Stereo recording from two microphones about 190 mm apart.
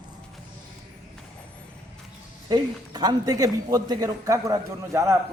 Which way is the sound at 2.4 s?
20° right (ahead or behind).